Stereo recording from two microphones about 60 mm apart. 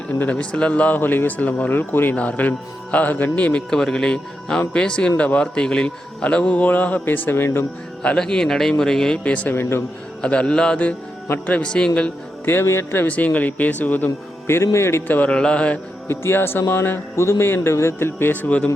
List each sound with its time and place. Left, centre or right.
0.3 s a man's voice: centre
3.7 s a man's voice: centre; by 7.6 s left
8.0 s speech: centre
9.1 s a man's voice: left
9.6 s speech: left
10.2 s a man's voice: centre
12.5 s a man's voice: left
13.1 s a man's voice: left
14.4 s speech: left
15.0 s a man's voice: left
15.3 s speech: centre
16.0 s a man's voice: left
17.2 s a man's voice: left